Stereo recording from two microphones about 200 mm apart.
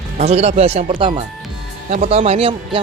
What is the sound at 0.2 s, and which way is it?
Speech, 30° right (ahead or behind).